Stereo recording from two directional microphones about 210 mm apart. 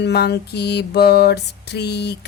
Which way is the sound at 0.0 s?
50° left (ahead or behind).